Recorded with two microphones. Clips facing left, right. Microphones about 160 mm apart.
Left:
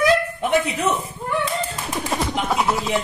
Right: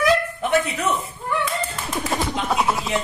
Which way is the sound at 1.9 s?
Centre (ahead or behind).